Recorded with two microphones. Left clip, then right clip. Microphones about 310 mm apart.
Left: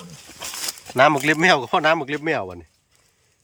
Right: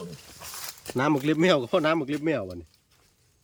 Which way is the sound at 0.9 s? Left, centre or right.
Centre.